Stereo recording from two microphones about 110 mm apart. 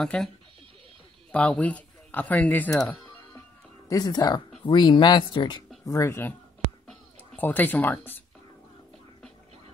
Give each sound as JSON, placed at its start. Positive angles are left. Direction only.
{"t": 0.0, "sound": "speech", "side_deg": 5}
{"t": 1.3, "sound": "speech", "side_deg": 10}
{"t": 3.9, "sound": "speech", "side_deg": 35}
{"t": 5.9, "sound": "speech", "side_deg": 25}
{"t": 7.3, "sound": "speech", "side_deg": 15}